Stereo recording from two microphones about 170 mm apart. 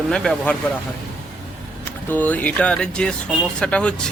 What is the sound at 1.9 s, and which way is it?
A man's voice, 10° left (ahead or behind).